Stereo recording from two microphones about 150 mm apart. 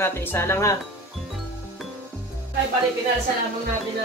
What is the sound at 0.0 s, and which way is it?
Speech, 15° left (ahead or behind).